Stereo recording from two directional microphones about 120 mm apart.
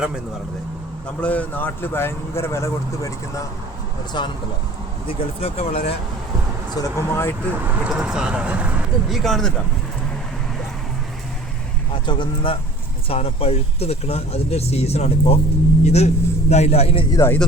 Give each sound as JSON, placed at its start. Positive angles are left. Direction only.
{"t": 1.2, "sound": "speech", "side_deg": 10}
{"t": 4.1, "sound": "speech", "side_deg": 40}
{"t": 5.0, "sound": "speech", "side_deg": 55}
{"t": 6.7, "sound": "speech", "side_deg": 20}
{"t": 7.5, "sound": "speech", "side_deg": -15}
{"t": 9.1, "sound": "speech", "side_deg": 5}
{"t": 12.0, "sound": "speech", "side_deg": 40}
{"t": 17.1, "sound": "speech", "side_deg": 25}